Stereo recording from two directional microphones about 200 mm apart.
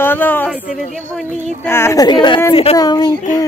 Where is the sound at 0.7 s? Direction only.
40° left (ahead or behind).